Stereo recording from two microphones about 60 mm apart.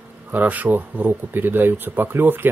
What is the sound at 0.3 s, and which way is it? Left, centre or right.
Speech, right.